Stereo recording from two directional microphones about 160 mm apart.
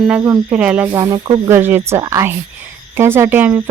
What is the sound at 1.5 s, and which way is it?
Speech, 15° right (ahead or behind).